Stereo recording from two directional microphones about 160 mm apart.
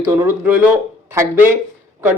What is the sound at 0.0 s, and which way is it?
Speech, 15° right (ahead or behind).